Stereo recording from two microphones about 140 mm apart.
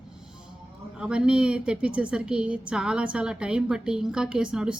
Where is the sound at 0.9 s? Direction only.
5° right (ahead or behind).